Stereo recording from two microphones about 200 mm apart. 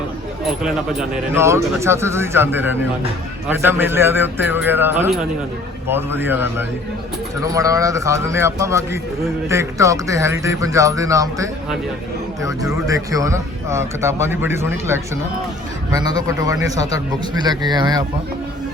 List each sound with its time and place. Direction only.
0.4 s a man's voice: 5° right (ahead or behind)
12.7 s a man's voice: 15° right (ahead or behind)